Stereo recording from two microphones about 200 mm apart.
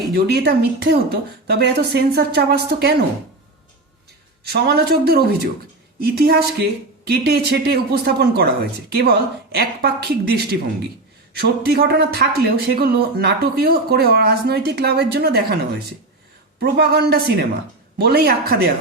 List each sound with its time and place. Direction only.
0.1 s speech: 55° right (ahead or behind)
4.4 s speech: 55° right (ahead or behind)
16.6 s speech: 50° right (ahead or behind)